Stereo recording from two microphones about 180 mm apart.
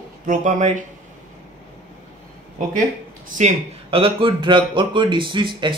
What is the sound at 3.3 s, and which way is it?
A man's voice, 35° right (ahead or behind).